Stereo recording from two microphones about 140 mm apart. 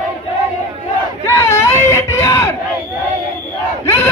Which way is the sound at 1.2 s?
20° left (ahead or behind).